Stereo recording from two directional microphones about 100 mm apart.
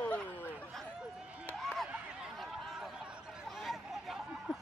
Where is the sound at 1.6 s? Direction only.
5° left (ahead or behind).